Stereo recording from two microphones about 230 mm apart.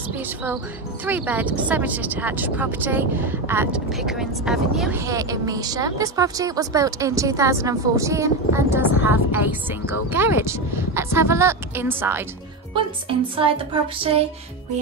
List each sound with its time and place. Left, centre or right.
1.0 s speech: centre
13.9 s music: right